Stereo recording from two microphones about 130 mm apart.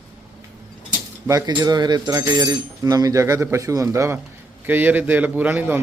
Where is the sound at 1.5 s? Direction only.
30° right (ahead or behind).